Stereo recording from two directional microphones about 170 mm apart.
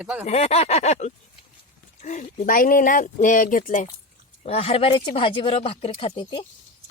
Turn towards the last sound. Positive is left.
turn(degrees=30)  # may be behind; listen again after turning